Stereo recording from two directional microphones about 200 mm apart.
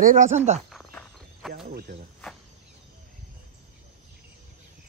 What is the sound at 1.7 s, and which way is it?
Speech, 45° right (ahead or behind).